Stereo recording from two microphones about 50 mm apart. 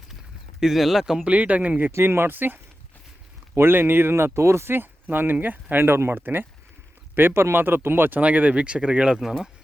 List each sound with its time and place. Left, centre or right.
0.6 s speech: centre
1.2 s speech: right
1.9 s speech: right
5.8 s speech: right
8.2 s speech: right; by 9.5 s centre